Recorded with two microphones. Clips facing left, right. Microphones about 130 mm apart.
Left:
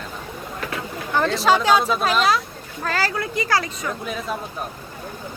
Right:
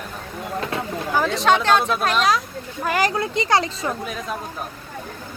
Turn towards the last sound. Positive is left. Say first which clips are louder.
# left 1 dB
turn(degrees=0)  # may be behind; listen again after turning